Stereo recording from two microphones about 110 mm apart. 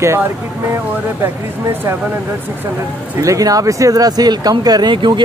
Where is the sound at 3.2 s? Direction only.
30° right (ahead or behind).